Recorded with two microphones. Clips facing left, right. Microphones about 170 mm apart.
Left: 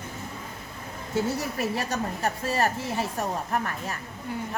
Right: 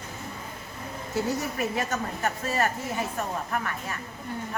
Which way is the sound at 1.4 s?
35° left (ahead or behind).